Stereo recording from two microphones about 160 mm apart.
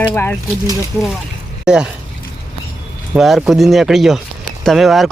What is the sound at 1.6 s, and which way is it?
Speech, 5° right (ahead or behind).